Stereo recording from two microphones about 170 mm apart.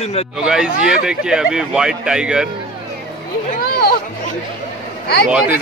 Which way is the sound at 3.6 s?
65° left (ahead or behind).